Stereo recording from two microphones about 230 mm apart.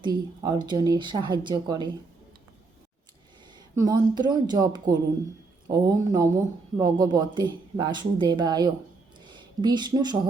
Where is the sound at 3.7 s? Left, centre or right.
Centre.